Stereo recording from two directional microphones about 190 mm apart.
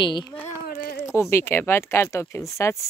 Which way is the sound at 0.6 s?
50° left (ahead or behind).